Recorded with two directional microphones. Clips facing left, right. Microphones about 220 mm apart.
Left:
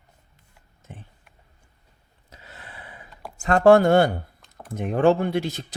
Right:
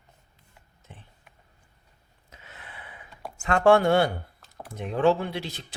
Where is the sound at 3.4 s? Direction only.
40° left (ahead or behind).